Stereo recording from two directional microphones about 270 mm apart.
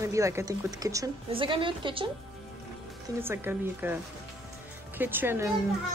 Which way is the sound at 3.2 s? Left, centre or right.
Centre.